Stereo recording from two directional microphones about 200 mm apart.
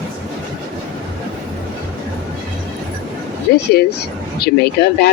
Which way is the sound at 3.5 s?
50° left (ahead or behind).